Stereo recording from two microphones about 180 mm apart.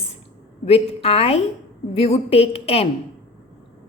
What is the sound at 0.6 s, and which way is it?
A woman's voice, 35° left (ahead or behind).